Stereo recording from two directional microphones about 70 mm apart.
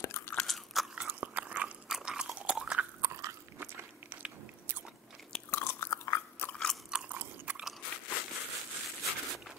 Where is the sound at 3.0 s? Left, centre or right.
Right.